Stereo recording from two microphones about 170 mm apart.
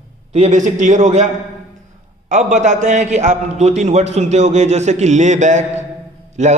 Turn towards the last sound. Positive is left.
turn(degrees=-40)  # may be behind; listen again after turning